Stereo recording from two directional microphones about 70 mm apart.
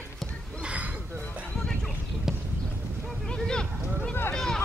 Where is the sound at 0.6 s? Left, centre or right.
Centre.